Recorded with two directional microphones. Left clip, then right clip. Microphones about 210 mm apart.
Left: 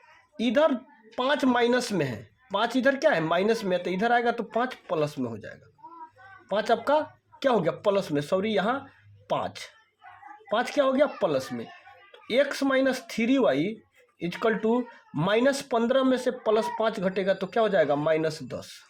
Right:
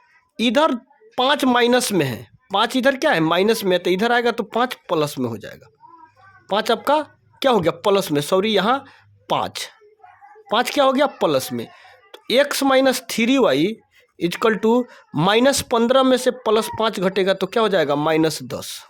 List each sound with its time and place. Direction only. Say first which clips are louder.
0.3 s speech: right 5 dB; 40° right (ahead or behind)